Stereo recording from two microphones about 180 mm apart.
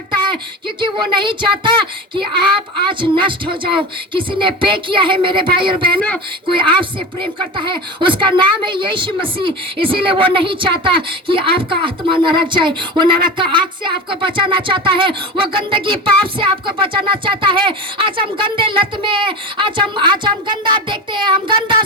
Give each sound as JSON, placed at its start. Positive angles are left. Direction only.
{"t": 0.8, "sound": "a woman's voice", "side_deg": -25}